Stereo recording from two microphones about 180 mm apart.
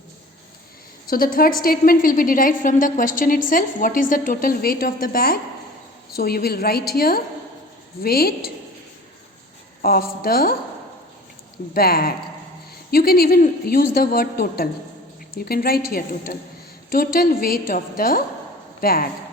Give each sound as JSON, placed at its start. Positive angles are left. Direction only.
{"t": 1.1, "sound": "a woman's voice", "side_deg": 55}
{"t": 9.8, "sound": "a woman's voice", "side_deg": 55}
{"t": 11.7, "sound": "a woman's voice", "side_deg": 55}